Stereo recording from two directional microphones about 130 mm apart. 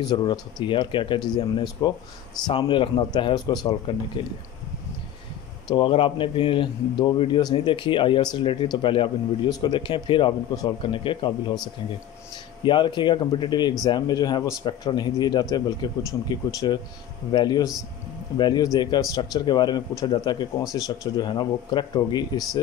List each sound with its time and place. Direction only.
0.0 s speech: 35° left (ahead or behind)
5.7 s speech: 40° left (ahead or behind)
12.6 s speech: 40° left (ahead or behind)